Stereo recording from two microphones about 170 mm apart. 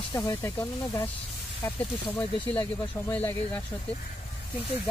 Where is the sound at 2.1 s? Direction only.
10° left (ahead or behind).